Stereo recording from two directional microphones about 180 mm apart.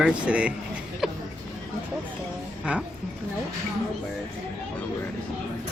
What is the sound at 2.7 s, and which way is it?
Speech, 5° right (ahead or behind).